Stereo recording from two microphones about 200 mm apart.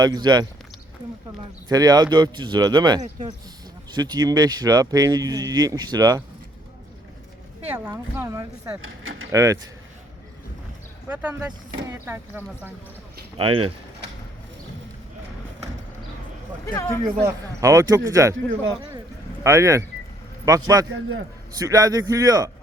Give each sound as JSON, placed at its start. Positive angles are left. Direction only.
{"t": 0.0, "sound": "speech", "side_deg": -20}
{"t": 1.7, "sound": "speech", "side_deg": -20}
{"t": 7.7, "sound": "speech", "side_deg": -10}
{"t": 8.8, "sound": "speech", "side_deg": -80}
{"t": 9.3, "sound": "speech", "side_deg": -15}
{"t": 11.1, "sound": "speech", "side_deg": -10}
{"t": 13.3, "sound": "speech", "side_deg": -25}
{"t": 16.7, "sound": "speech", "side_deg": 15}
{"t": 17.2, "sound": "speech", "side_deg": -15}
{"t": 18.8, "sound": "a sound", "side_deg": -15}
{"t": 20.4, "sound": "speech", "side_deg": -15}